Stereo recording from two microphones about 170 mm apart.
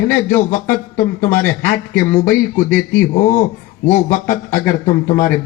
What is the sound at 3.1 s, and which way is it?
A man's voice, 50° left (ahead or behind).